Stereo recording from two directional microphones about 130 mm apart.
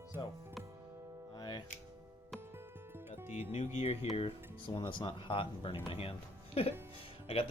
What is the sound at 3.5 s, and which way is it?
Speech, 55° left (ahead or behind).